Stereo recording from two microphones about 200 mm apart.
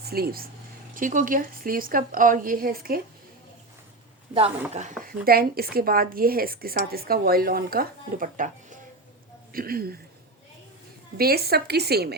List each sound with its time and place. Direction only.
0.0 s a woman's voice: 50° right (ahead or behind)
4.7 s speech: 35° right (ahead or behind)
5.0 s a woman's voice: 50° right (ahead or behind)
11.2 s a woman's voice: 50° right (ahead or behind)